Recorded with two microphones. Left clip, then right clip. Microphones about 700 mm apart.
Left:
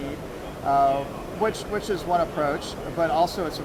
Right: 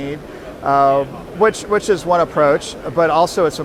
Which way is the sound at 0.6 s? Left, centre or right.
Right.